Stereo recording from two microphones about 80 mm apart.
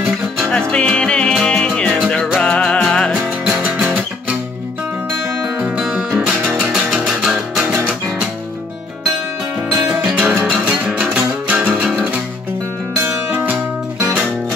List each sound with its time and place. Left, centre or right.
0.5 s music: centre
3.4 s music: centre
5.8 s music: centre
10.1 s music: centre